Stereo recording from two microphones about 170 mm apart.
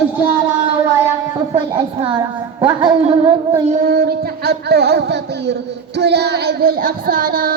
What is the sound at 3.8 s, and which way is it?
Music, 65° right (ahead or behind).